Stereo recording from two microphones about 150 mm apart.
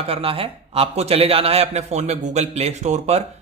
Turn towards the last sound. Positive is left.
turn(degrees=-50)  # may be behind; listen again after turning